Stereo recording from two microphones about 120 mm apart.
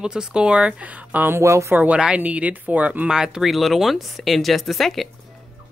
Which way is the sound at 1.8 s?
10° right (ahead or behind).